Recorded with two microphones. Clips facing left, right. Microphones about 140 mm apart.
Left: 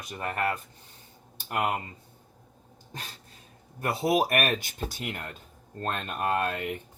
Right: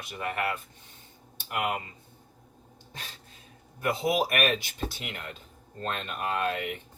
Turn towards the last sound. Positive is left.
turn(degrees=45)  # may be behind; listen again after turning